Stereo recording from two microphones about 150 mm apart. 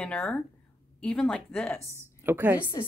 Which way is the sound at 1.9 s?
15° right (ahead or behind).